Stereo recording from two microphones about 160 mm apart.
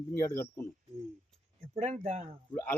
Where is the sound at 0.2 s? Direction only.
15° left (ahead or behind).